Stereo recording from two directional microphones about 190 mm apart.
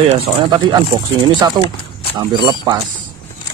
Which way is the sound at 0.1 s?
30° right (ahead or behind).